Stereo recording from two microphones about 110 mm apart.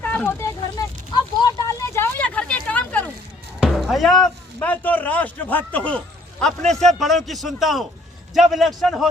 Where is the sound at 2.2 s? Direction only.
10° left (ahead or behind).